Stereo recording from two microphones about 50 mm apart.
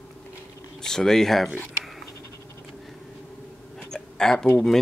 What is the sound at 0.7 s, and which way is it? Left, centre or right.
Speech, centre.